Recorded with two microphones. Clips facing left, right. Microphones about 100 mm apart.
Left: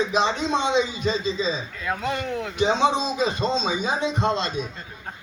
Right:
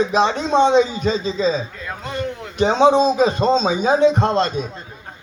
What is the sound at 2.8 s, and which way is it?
Speech, 50° right (ahead or behind).